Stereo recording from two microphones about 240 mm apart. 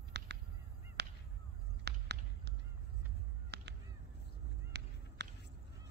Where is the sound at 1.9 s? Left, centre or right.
Right.